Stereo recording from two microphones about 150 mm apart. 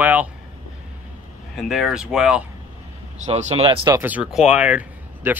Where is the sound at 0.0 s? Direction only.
10° right (ahead or behind).